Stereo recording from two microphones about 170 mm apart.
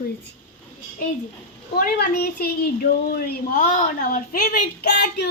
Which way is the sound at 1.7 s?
65° left (ahead or behind).